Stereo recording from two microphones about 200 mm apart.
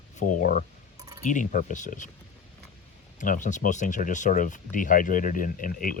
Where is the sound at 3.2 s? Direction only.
40° left (ahead or behind).